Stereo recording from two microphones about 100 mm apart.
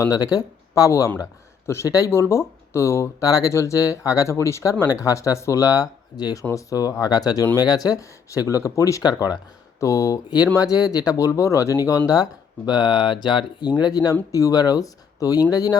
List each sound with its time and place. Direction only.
0.0 s speech: 35° left (ahead or behind)